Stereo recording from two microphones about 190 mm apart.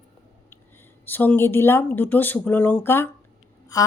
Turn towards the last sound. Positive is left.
turn(degrees=15)  # may be behind; listen again after turning